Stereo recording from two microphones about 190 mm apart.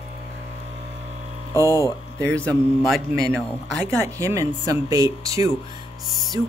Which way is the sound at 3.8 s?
15° right (ahead or behind).